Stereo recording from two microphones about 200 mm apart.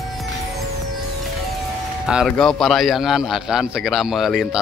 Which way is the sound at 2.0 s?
Centre (ahead or behind).